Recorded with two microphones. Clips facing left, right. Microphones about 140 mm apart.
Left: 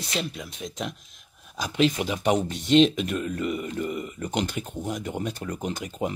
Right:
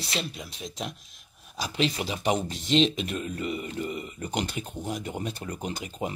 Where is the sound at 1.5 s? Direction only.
45° left (ahead or behind).